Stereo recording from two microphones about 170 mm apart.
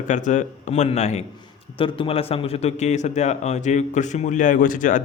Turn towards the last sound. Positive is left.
turn(degrees=50)  # may be behind; listen again after turning